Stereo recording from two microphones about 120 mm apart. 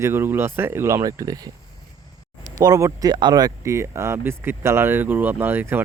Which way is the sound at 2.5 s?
30° right (ahead or behind).